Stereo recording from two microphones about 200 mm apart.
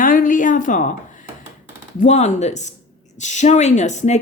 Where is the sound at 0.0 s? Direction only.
40° left (ahead or behind).